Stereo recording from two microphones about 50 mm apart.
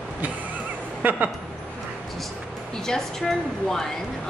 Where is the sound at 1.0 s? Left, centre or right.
Right.